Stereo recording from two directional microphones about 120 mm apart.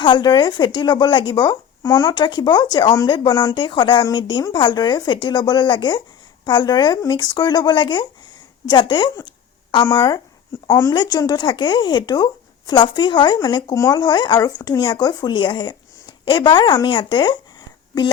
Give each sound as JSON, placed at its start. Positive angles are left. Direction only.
{"t": 0.0, "sound": "speech", "side_deg": 40}
{"t": 10.7, "sound": "a woman's voice", "side_deg": 25}
{"t": 10.9, "sound": "speech", "side_deg": 35}